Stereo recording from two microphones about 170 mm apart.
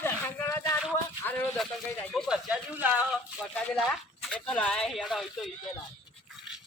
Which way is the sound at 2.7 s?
10° right (ahead or behind).